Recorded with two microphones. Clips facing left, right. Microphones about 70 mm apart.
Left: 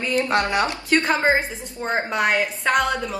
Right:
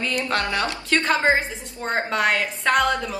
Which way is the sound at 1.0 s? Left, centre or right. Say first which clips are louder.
Even; centre.